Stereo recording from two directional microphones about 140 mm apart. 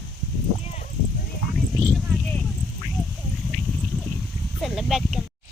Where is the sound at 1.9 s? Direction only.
Centre (ahead or behind).